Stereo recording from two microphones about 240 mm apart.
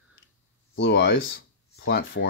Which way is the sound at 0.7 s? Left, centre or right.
Left.